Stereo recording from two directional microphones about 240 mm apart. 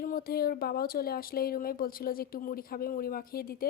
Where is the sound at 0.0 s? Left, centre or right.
Left.